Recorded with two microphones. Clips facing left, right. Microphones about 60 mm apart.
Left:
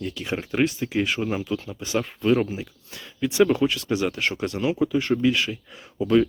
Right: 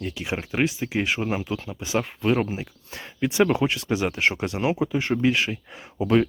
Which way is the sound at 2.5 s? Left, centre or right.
Right.